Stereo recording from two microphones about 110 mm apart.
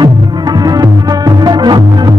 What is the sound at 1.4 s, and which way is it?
Music, 40° right (ahead or behind).